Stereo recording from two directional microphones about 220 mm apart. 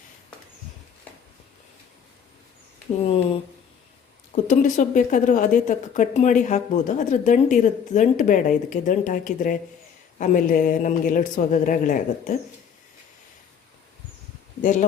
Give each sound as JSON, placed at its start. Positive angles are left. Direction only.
{"t": 4.3, "sound": "a woman's voice", "side_deg": 35}
{"t": 14.6, "sound": "speech", "side_deg": 35}